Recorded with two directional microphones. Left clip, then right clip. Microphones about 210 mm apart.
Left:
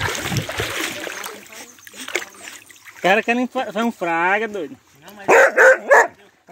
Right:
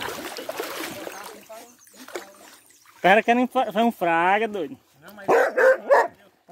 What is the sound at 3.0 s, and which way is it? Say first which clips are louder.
Speech: even; 20° right (ahead or behind).